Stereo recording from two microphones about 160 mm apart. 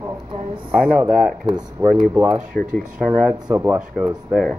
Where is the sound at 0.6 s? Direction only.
5° right (ahead or behind).